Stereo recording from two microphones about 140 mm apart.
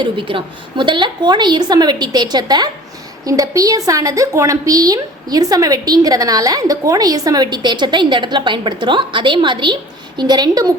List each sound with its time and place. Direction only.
0.0 s a woman's voice: 35° right (ahead or behind)